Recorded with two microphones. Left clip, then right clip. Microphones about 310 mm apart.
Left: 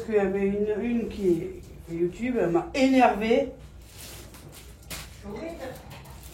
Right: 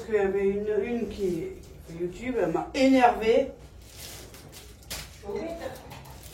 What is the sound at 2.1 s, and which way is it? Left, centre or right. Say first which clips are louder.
Speech: even; centre.